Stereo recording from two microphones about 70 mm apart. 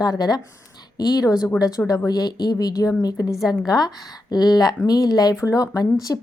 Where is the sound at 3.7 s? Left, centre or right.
Left.